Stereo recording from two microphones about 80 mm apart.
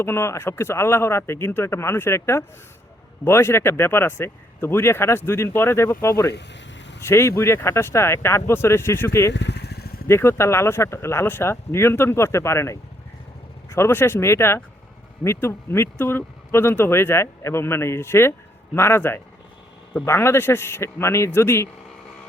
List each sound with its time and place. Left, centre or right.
0.0 s speech: left